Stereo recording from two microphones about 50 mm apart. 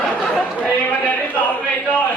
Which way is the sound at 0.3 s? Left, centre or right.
Left.